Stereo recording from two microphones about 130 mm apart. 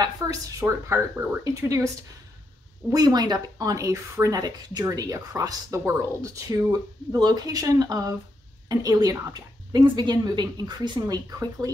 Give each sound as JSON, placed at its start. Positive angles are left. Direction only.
{"t": 0.0, "sound": "speech", "side_deg": -25}
{"t": 2.9, "sound": "a woman's voice", "side_deg": -30}